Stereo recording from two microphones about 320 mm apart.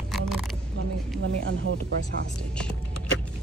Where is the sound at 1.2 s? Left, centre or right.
Right.